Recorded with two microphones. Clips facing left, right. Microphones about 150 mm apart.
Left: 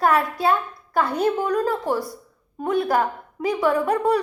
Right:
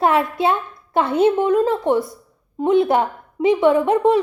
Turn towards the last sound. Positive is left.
turn(degrees=-25)  # may be behind; listen again after turning